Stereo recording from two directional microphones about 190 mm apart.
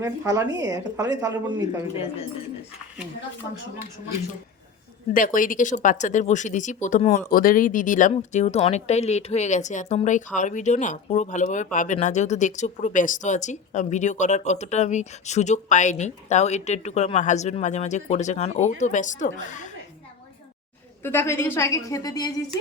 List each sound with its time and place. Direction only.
0.0 s a woman's voice: 20° right (ahead or behind)
5.1 s speech: 45° left (ahead or behind)
7.3 s speech: 50° left (ahead or behind)
21.0 s a woman's voice: 10° left (ahead or behind)